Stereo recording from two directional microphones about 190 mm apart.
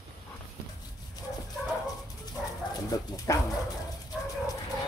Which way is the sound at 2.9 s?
20° left (ahead or behind).